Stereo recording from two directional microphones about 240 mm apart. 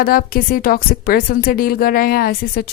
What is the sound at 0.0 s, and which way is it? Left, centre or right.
Speech, left.